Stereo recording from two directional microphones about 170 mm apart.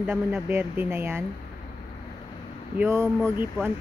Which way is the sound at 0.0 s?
5° right (ahead or behind).